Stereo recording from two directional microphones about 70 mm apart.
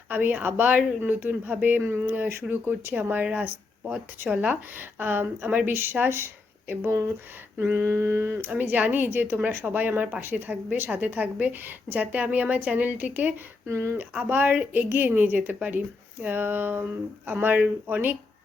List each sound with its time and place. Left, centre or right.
0.1 s a woman's voice: right
4.7 s a woman's voice: right
7.6 s a sound: right
8.4 s a woman's voice: right
13.7 s a sound: right
13.9 s a woman's voice: right